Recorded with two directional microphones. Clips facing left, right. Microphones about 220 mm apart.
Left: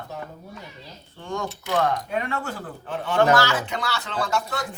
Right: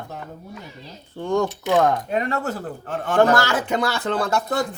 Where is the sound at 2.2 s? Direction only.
40° right (ahead or behind).